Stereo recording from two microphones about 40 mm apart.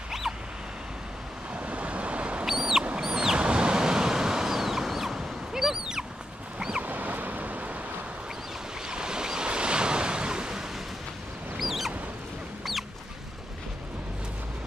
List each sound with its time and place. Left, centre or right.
1.5 s waves: right
2.4 s a sound: centre
3.4 s waves: right
6.8 s a sound: right
8.8 s waves: centre
11.5 s rodents: centre